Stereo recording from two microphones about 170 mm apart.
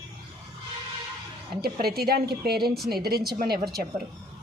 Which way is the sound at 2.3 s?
65° right (ahead or behind).